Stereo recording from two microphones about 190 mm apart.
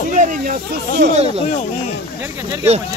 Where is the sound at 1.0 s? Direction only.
65° right (ahead or behind).